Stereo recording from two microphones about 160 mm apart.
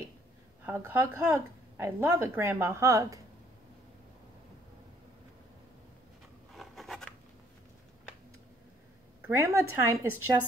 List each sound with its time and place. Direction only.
0.7 s a woman's voice: 15° right (ahead or behind)
6.5 s writing: centre (ahead or behind)
9.2 s a woman's voice: 15° right (ahead or behind)